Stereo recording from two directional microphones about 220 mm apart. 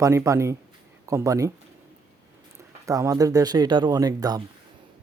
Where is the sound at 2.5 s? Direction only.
15° right (ahead or behind).